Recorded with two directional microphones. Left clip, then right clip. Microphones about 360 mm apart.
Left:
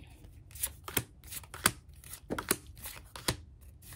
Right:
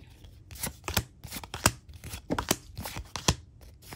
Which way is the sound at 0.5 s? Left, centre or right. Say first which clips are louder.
Right 5 dB; right.